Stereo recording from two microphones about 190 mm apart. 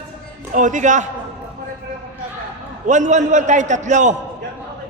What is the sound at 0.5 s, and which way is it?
Speech, 40° right (ahead or behind).